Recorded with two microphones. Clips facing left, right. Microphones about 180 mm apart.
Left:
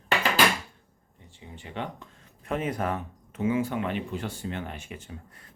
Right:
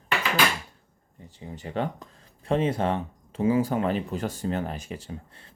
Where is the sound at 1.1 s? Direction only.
40° right (ahead or behind).